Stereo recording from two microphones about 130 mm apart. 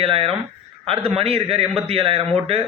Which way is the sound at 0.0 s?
45° right (ahead or behind).